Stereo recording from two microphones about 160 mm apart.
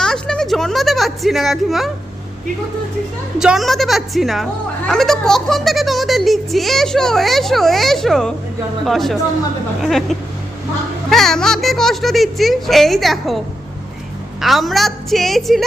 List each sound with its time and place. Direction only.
0.0 s a child's voice: 5° left (ahead or behind)
3.3 s a child's voice: 5° right (ahead or behind)
14.4 s a child's voice: centre (ahead or behind)